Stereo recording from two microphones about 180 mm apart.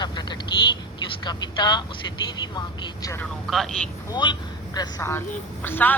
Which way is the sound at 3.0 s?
15° left (ahead or behind).